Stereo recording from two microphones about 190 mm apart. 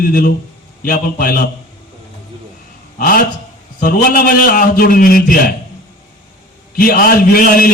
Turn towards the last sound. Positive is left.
turn(degrees=50)  # may be behind; listen again after turning